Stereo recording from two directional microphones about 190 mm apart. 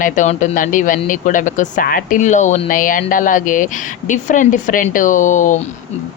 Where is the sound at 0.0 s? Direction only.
40° left (ahead or behind).